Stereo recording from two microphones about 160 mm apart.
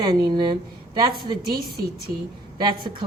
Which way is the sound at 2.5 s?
30° right (ahead or behind).